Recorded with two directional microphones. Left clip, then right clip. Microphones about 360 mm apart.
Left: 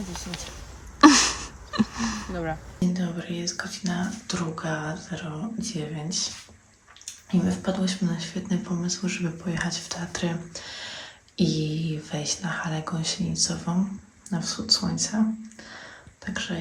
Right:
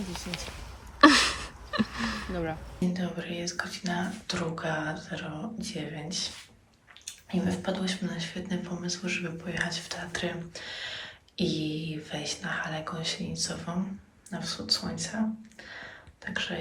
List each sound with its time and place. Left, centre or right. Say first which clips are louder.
1.0 s speech: left 3 dB; centre
16.2 s speech: left 1 dB; centre